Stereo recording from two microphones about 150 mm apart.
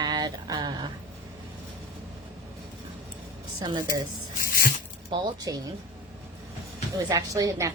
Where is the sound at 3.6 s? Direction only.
30° right (ahead or behind).